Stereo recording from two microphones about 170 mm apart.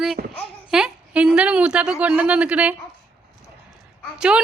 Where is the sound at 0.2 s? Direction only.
60° right (ahead or behind).